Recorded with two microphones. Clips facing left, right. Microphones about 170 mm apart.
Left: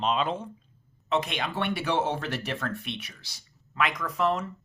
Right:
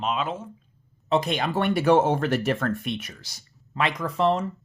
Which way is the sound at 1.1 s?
40° right (ahead or behind).